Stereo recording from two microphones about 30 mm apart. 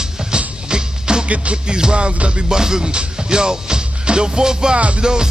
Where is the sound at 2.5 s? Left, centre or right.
Right.